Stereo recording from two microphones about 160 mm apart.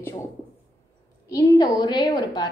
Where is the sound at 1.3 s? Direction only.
25° left (ahead or behind).